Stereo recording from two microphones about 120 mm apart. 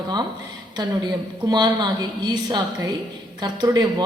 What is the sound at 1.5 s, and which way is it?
A woman's voice, 35° right (ahead or behind).